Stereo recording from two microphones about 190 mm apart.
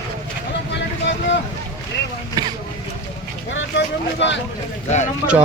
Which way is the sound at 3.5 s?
70° left (ahead or behind).